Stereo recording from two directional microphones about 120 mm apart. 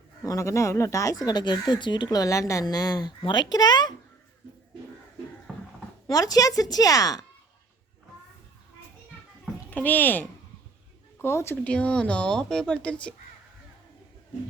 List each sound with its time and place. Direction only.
0.2 s speech: 25° left (ahead or behind)
5.5 s a sound: centre (ahead or behind)
6.1 s speech: 30° left (ahead or behind)
9.6 s speech: 15° left (ahead or behind)
11.7 s speech: 10° left (ahead or behind)